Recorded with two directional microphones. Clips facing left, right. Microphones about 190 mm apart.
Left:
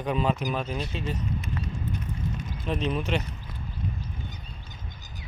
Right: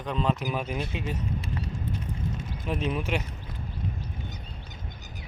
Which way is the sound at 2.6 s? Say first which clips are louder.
Left 1 dB; 10° right (ahead or behind).